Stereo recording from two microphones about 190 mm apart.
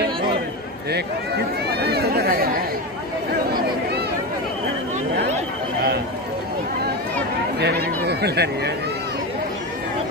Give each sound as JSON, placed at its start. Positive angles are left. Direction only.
{"t": 1.8, "sound": "chatter", "side_deg": -60}
{"t": 7.5, "sound": "speech", "side_deg": -60}